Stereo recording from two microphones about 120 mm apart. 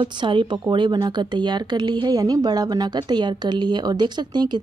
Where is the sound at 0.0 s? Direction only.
40° right (ahead or behind).